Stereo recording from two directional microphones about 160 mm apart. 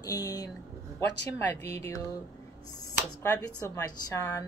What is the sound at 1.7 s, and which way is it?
Speech, 20° left (ahead or behind).